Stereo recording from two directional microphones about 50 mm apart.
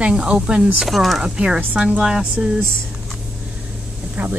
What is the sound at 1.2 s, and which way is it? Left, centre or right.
Speech, centre.